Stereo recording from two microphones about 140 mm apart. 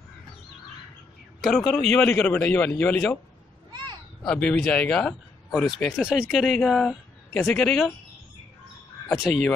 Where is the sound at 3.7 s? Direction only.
30° right (ahead or behind).